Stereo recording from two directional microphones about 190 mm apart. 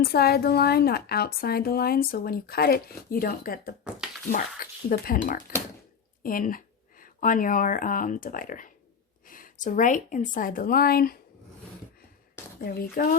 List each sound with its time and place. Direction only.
0.0 s speech: 55° left (ahead or behind)
4.9 s speech: 50° left (ahead or behind)
12.5 s speech: 50° left (ahead or behind)